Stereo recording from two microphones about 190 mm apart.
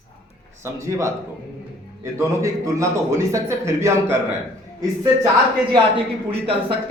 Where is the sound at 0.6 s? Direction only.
15° right (ahead or behind).